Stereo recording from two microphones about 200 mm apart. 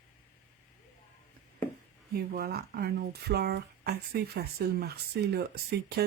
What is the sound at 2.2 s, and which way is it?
Speech, 50° right (ahead or behind).